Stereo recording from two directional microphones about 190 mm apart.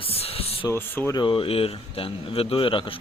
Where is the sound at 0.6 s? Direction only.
15° left (ahead or behind).